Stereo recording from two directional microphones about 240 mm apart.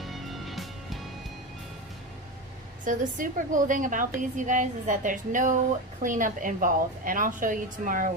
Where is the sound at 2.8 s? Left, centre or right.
Right.